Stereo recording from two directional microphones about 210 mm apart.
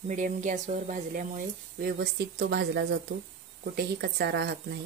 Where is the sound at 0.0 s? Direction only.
35° right (ahead or behind).